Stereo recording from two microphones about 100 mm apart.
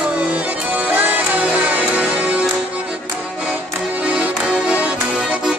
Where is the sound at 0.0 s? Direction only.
15° right (ahead or behind).